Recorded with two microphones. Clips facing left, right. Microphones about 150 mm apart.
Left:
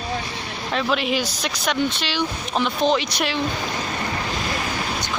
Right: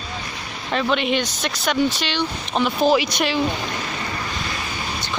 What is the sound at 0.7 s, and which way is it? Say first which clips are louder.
Speech: right 2 dB; centre (ahead or behind).